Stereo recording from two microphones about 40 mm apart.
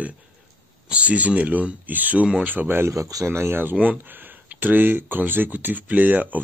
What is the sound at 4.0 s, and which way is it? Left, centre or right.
Speech, right.